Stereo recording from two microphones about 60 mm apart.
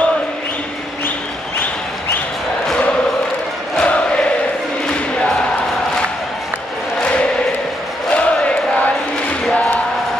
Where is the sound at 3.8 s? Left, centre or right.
Left.